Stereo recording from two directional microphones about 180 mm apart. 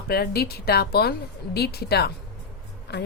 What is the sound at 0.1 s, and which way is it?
A woman's voice, 60° left (ahead or behind).